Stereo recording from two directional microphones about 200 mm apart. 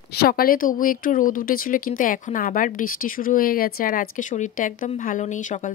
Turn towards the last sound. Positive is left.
turn(degrees=40)  # may be behind; listen again after turning